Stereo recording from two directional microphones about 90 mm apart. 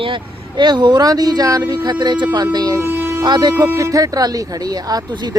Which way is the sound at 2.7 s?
20° right (ahead or behind).